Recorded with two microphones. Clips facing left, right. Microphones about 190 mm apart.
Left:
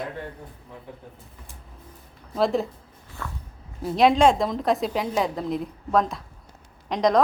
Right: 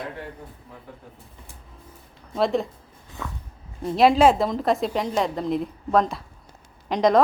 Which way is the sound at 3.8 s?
Centre (ahead or behind).